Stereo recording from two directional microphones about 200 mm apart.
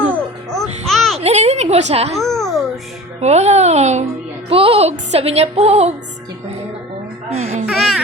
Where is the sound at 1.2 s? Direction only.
35° right (ahead or behind).